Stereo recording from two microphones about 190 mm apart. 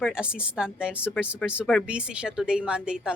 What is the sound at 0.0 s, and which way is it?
A woman's voice, 5° right (ahead or behind).